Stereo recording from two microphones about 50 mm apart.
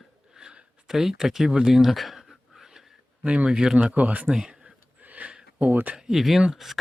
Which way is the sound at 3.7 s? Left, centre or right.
Right.